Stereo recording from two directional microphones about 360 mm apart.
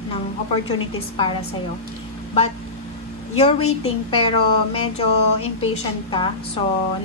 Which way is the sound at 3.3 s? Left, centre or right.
Centre.